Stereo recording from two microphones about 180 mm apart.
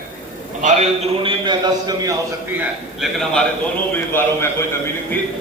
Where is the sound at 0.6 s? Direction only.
40° right (ahead or behind); by 2.1 s 20° right (ahead or behind).